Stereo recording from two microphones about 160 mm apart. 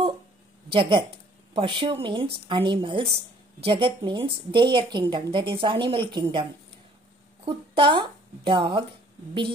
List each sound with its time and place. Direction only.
0.7 s a woman's voice: 35° right (ahead or behind)
7.4 s a woman's voice: 35° right (ahead or behind)